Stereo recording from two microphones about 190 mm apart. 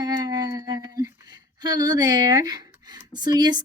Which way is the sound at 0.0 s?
20° right (ahead or behind).